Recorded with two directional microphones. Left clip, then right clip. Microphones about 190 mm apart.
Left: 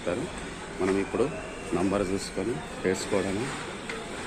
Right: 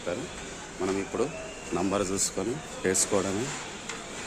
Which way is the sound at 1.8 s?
20° right (ahead or behind).